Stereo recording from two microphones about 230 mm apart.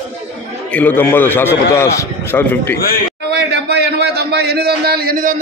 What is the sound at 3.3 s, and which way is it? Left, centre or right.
A man's voice, right.